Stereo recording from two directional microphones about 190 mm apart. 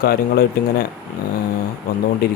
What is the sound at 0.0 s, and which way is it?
Speech, 55° left (ahead or behind).